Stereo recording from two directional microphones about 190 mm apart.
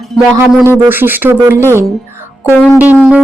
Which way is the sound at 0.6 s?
10° right (ahead or behind).